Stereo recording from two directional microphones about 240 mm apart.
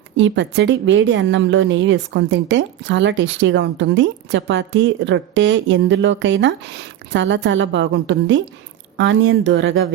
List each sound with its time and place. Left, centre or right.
0.2 s a woman's voice: right